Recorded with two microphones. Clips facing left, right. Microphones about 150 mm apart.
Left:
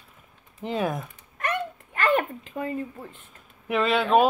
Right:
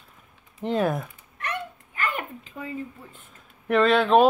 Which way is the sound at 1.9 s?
75° left (ahead or behind).